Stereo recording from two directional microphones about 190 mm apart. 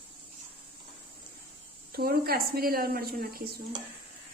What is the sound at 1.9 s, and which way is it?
A woman's voice, 55° right (ahead or behind).